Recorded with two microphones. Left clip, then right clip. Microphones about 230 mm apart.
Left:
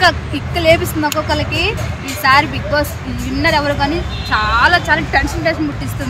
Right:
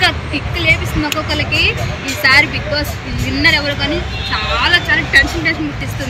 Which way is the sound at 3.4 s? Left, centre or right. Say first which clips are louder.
Right 1 dB; centre.